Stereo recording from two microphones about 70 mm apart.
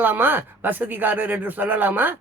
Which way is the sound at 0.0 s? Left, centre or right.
Right.